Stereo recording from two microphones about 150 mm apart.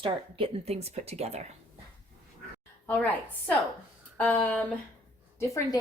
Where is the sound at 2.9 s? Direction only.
10° left (ahead or behind).